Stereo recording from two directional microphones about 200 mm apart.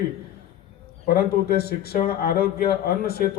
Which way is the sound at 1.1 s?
50° left (ahead or behind).